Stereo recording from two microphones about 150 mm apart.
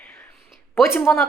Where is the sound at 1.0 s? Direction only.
5° left (ahead or behind).